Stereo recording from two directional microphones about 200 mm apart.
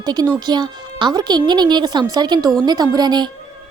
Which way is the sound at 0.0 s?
20° right (ahead or behind).